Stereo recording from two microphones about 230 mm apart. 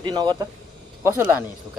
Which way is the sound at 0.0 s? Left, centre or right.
Centre.